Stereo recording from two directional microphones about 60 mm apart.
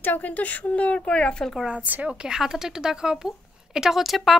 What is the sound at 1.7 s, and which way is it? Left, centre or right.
Speech, right.